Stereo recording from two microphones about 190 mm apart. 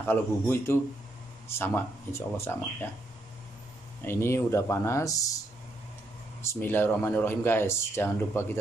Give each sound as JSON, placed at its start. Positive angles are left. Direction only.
{"t": 0.0, "sound": "speech", "side_deg": 10}
{"t": 4.0, "sound": "speech", "side_deg": 15}
{"t": 6.4, "sound": "speech", "side_deg": 10}